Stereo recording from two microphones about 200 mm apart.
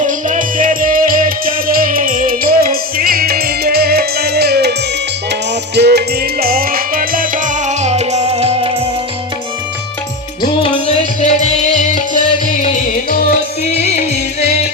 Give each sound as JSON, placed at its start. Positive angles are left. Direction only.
{"t": 0.0, "sound": "music", "side_deg": -40}
{"t": 10.4, "sound": "music", "side_deg": 30}